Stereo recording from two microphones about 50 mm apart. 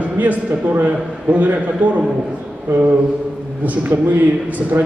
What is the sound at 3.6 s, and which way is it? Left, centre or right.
A man's voice, right.